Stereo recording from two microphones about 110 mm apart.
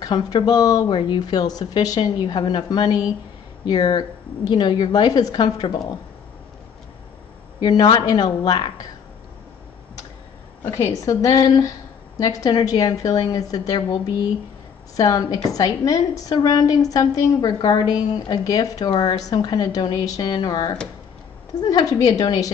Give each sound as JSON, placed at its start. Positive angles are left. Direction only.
{"t": 0.0, "sound": "a woman's voice", "side_deg": 35}
{"t": 7.6, "sound": "a woman's voice", "side_deg": 35}
{"t": 10.6, "sound": "a woman's voice", "side_deg": 25}